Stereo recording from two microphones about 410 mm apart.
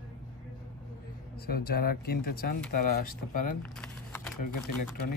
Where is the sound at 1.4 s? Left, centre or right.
Left.